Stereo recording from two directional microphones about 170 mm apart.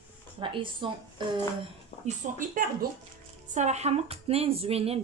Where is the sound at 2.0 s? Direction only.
50° right (ahead or behind); by 5.0 s 35° right (ahead or behind).